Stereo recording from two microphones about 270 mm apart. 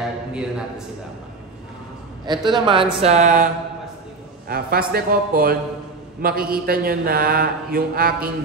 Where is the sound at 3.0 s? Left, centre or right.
Right.